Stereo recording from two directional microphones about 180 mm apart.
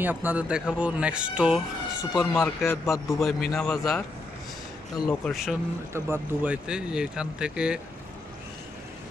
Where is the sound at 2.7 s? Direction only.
15° left (ahead or behind).